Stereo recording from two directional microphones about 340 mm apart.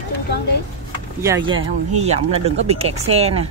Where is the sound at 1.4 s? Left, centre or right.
Centre.